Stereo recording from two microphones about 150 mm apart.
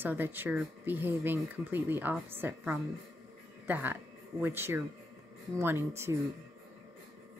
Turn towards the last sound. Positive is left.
turn(degrees=-15)  # may be behind; listen again after turning